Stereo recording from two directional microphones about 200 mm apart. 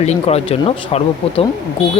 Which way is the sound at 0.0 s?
35° left (ahead or behind).